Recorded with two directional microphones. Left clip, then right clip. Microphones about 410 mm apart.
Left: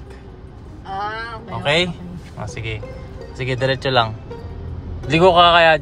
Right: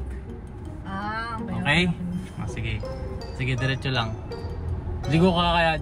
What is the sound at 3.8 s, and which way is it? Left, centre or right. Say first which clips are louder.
Speech: left 11 dB; centre.